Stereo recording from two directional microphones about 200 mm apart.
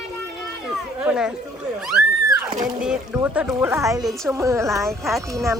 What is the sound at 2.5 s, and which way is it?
Speech, 40° right (ahead or behind).